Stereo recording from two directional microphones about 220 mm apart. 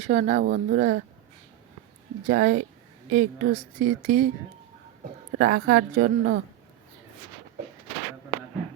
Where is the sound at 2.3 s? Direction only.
40° right (ahead or behind).